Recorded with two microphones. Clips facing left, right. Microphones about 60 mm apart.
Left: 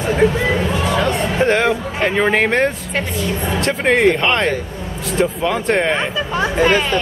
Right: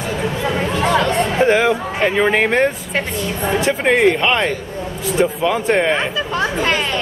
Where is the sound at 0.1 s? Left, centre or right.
Left.